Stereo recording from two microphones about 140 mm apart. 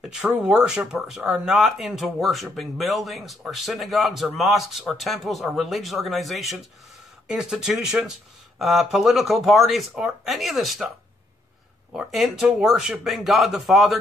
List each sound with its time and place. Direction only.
0.1 s speech: 5° right (ahead or behind)
11.9 s speech: centre (ahead or behind)